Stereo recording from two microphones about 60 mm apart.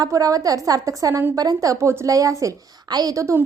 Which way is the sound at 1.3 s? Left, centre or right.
Right.